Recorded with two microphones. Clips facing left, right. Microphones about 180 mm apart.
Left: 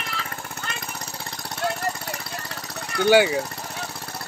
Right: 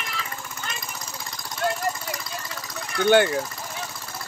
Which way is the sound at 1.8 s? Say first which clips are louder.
Right 1 dB; 65° left (ahead or behind).